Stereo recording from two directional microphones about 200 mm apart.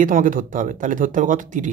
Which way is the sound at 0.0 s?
40° right (ahead or behind).